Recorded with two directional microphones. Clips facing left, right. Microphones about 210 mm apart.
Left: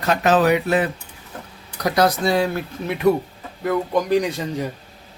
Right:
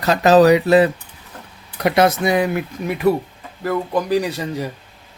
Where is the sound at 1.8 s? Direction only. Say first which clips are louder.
Right 3 dB; 25° right (ahead or behind); by 4.7 s 5° right (ahead or behind).